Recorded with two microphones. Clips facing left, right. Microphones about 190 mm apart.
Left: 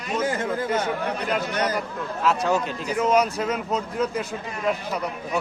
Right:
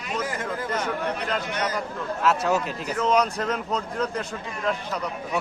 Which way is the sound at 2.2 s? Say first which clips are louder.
Left 1 dB; 5° right (ahead or behind).